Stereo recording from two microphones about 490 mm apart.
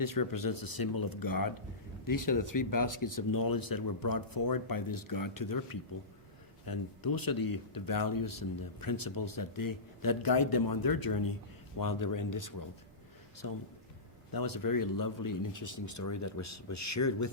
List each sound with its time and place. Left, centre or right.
0.0 s speech: left